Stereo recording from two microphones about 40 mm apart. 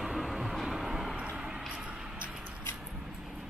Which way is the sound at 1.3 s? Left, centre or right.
Centre.